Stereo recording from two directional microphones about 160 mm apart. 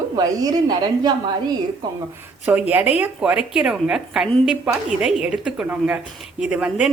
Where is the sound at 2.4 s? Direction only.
10° right (ahead or behind).